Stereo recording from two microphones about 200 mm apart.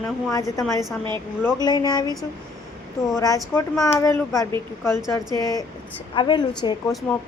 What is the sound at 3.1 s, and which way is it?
Speech, 15° left (ahead or behind).